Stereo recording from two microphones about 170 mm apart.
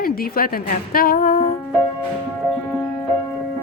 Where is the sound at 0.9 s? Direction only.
60° left (ahead or behind).